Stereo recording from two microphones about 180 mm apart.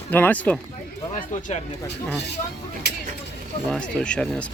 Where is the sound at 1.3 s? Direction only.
45° left (ahead or behind).